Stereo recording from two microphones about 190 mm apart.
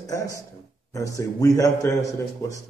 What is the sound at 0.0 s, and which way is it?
A man's voice, 15° left (ahead or behind).